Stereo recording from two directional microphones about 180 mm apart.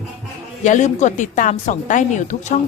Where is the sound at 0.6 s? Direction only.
40° left (ahead or behind).